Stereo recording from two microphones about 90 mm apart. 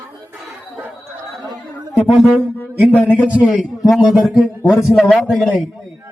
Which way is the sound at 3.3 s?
15° right (ahead or behind).